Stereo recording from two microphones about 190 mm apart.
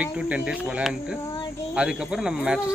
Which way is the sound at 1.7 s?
5° right (ahead or behind).